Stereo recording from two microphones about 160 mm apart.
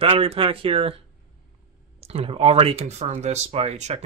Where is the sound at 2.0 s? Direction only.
40° right (ahead or behind).